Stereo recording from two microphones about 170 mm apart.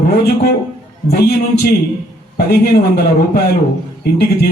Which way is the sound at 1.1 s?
65° left (ahead or behind).